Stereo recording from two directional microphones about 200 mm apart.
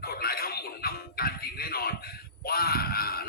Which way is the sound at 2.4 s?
50° left (ahead or behind).